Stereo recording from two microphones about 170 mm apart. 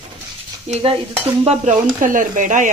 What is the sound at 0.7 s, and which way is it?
Stir, 40° right (ahead or behind).